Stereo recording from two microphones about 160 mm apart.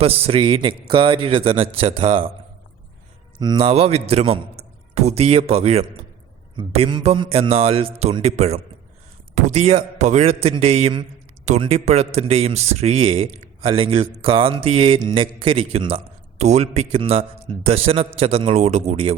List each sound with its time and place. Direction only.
0.0 s a man's voice: 35° right (ahead or behind)
3.4 s a man's voice: 30° right (ahead or behind)